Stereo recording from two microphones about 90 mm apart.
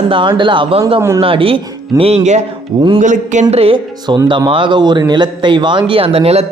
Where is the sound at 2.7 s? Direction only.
45° right (ahead or behind).